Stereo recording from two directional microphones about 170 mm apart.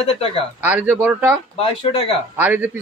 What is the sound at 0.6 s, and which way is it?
Speech, 10° right (ahead or behind).